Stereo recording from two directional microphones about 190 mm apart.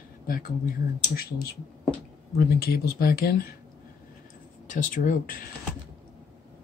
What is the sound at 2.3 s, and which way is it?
Speech, 55° left (ahead or behind).